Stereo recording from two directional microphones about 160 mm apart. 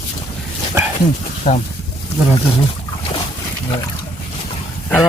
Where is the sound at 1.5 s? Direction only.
40° left (ahead or behind).